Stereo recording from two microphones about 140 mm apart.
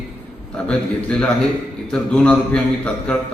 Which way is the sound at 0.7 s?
5° left (ahead or behind).